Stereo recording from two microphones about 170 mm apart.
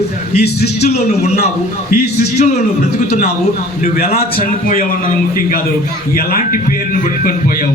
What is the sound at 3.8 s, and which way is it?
A man's voice, 65° left (ahead or behind).